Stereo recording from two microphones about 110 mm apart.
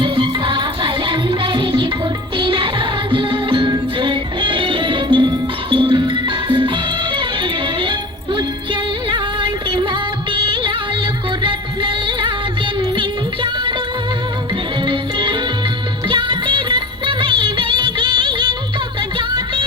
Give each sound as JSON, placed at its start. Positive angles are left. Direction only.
{"t": 0.0, "sound": "music", "side_deg": -50}
{"t": 14.8, "sound": "music", "side_deg": -50}